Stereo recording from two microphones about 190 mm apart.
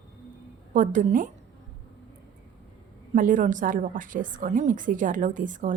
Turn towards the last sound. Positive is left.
turn(degrees=-45)  # may be behind; listen again after turning